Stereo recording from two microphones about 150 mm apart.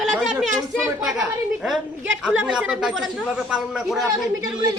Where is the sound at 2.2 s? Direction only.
5° right (ahead or behind).